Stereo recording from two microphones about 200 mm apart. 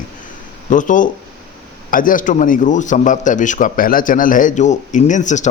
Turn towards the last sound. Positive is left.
turn(degrees=35)  # may be behind; listen again after turning